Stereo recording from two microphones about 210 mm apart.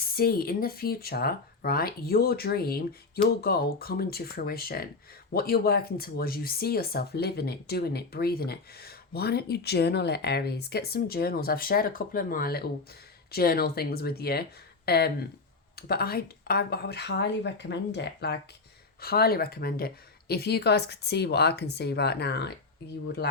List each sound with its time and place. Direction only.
0.2 s speech: 45° left (ahead or behind)